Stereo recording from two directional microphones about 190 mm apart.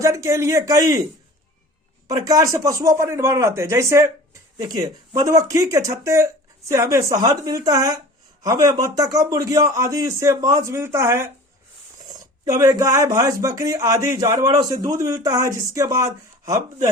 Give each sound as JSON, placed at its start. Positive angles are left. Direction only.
{"t": 0.0, "sound": "speech", "side_deg": -15}
{"t": 2.0, "sound": "speech", "side_deg": -20}
{"t": 12.5, "sound": "speech", "side_deg": -20}